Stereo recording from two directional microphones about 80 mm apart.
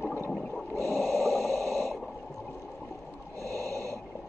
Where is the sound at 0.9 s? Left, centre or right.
Centre.